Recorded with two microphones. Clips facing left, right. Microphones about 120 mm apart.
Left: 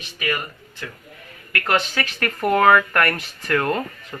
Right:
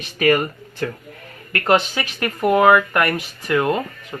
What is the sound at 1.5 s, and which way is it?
Speech, 25° right (ahead or behind).